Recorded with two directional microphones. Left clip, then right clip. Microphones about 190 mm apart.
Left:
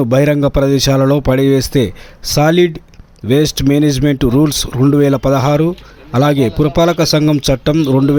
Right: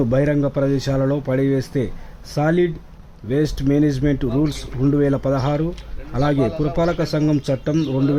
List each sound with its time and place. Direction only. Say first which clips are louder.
0.0 s speech: left 7 dB; 35° left (ahead or behind)